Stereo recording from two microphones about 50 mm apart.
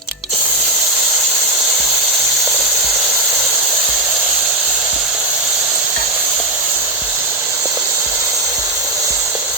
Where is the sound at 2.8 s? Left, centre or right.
Right.